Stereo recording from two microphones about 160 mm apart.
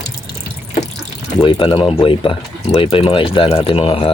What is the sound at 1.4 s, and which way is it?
Speech, 30° left (ahead or behind).